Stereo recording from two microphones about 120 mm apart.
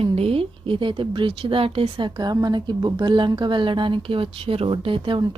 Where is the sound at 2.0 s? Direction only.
35° right (ahead or behind).